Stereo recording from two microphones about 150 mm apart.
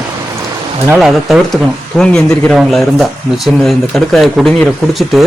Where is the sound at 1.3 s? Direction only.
Centre (ahead or behind).